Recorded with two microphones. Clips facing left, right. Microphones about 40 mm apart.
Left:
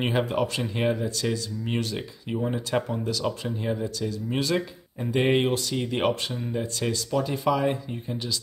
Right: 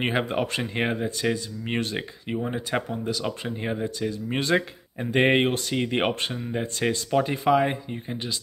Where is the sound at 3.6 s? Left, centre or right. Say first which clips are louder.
Right 1 dB; right.